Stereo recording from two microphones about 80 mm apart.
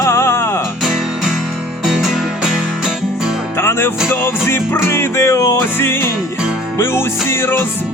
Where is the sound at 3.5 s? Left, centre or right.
Left.